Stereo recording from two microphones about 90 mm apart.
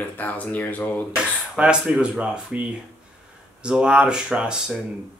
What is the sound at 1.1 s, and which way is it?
Speech, 10° right (ahead or behind).